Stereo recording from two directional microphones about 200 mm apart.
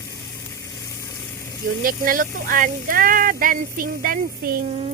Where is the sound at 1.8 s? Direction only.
45° right (ahead or behind).